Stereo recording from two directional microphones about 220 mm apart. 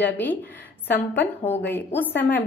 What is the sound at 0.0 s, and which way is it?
Speech, 10° left (ahead or behind).